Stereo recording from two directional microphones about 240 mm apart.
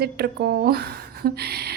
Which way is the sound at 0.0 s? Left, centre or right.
Right.